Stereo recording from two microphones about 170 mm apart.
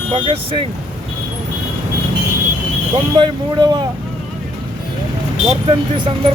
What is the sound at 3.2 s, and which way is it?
Speech, 25° right (ahead or behind).